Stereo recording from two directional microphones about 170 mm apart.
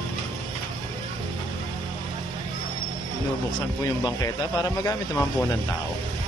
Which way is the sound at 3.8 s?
20° left (ahead or behind).